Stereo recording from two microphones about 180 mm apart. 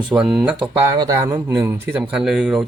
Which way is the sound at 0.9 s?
20° right (ahead or behind).